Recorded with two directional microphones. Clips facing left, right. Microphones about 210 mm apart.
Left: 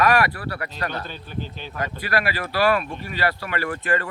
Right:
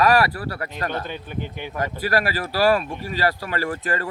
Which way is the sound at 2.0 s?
40° right (ahead or behind).